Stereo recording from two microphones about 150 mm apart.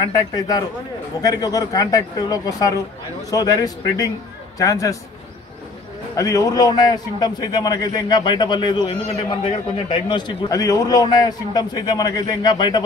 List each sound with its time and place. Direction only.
0.1 s a man's voice: 25° left (ahead or behind)
6.1 s a man's voice: 20° left (ahead or behind)